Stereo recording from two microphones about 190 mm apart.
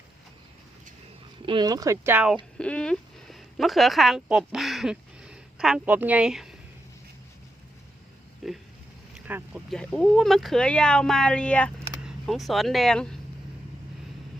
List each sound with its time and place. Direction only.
1.4 s speech: 25° right (ahead or behind); by 2.4 s 5° right (ahead or behind)
2.6 s speech: 5° left (ahead or behind)
8.4 s speech: centre (ahead or behind)